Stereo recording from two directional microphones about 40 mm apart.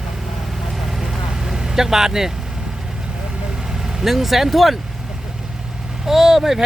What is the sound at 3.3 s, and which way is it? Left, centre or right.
Vehicle, centre.